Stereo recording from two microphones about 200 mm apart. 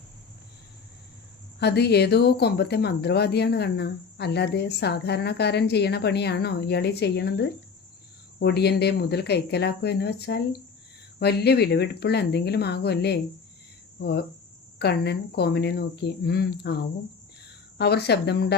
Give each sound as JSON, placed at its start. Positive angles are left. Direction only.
{"t": 1.5, "sound": "speech", "side_deg": 55}
{"t": 17.7, "sound": "speech", "side_deg": 55}